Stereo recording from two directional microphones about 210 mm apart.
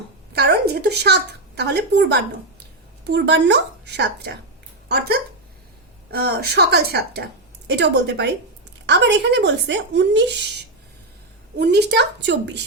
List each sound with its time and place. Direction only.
0.3 s a woman's voice: 50° right (ahead or behind)
11.5 s a woman's voice: 50° right (ahead or behind)